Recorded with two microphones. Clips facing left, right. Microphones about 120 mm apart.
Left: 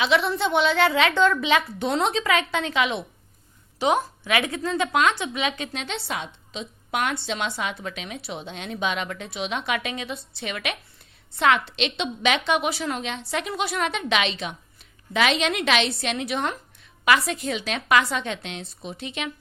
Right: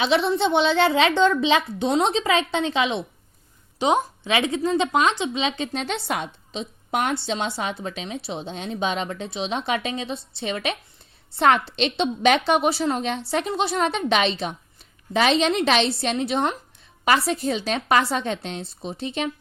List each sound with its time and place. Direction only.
0.0 s a woman's voice: 30° right (ahead or behind)
5.7 s a woman's voice: 45° right (ahead or behind)
6.6 s speech: 35° right (ahead or behind)